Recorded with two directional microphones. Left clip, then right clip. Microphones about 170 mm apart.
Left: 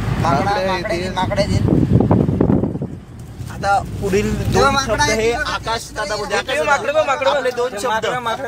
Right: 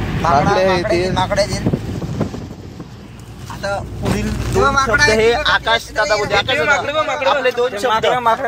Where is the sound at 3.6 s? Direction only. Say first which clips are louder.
Left 4 dB; 70° left (ahead or behind).